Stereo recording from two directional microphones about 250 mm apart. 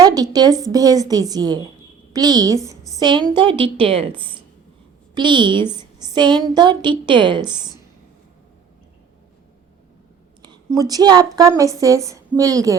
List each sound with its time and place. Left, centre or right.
0.0 s a woman's voice: centre
5.1 s a woman's voice: centre
10.4 s a woman's voice: centre